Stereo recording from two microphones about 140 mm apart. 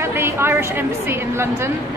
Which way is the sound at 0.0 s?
20° right (ahead or behind).